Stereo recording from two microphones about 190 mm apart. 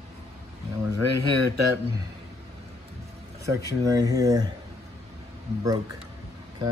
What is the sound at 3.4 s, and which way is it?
Speech, 15° right (ahead or behind).